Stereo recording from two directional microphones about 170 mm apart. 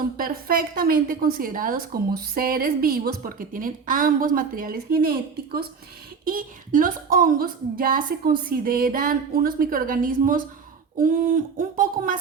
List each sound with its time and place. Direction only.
0.0 s a woman's voice: 60° right (ahead or behind)